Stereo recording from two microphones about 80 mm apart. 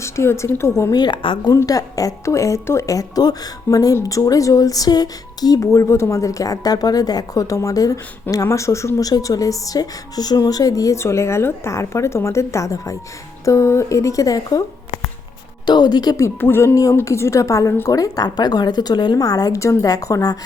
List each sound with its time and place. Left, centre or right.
0.0 s a woman's voice: left
0.9 s a woman's voice: left
1.5 s a woman's voice: left
5.5 s a woman's voice: left
10.9 s a woman's voice: left
15.6 s a woman's voice: left
16.1 s a woman's voice: left
16.7 s a woman's voice: left